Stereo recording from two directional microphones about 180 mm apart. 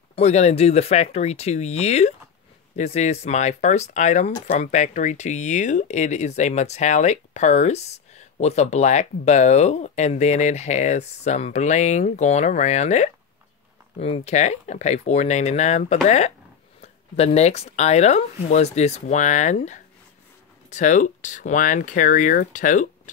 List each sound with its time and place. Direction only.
0.1 s speech: 35° left (ahead or behind)